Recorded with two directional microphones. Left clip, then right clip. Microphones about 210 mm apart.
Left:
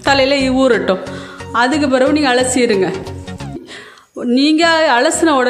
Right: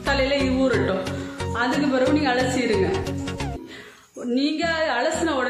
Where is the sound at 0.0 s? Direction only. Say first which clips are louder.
Left 9 dB; 45° left (ahead or behind).